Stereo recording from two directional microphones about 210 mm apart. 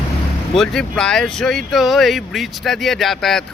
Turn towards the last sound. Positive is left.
turn(degrees=0)  # may be behind; listen again after turning